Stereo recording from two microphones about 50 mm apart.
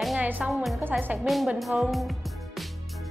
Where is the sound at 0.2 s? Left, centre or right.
Right.